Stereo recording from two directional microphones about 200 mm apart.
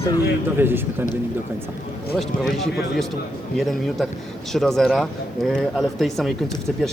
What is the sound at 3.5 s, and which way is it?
Speech, centre (ahead or behind).